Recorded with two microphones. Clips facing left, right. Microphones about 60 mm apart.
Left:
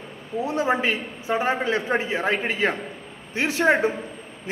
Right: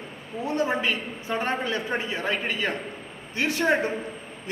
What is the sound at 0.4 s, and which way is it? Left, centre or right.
A man's voice, centre.